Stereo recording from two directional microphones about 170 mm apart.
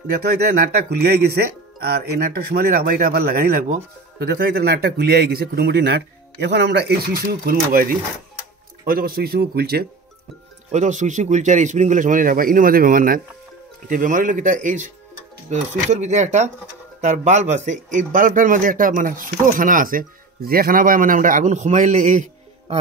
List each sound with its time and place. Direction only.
0.1 s speech: 65° right (ahead or behind)
10.7 s speech: 45° right (ahead or behind)